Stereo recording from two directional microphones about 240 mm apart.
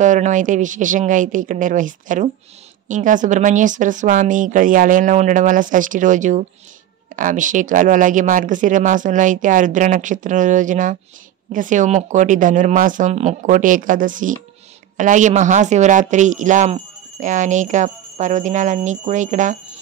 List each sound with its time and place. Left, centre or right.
0.0 s speech: right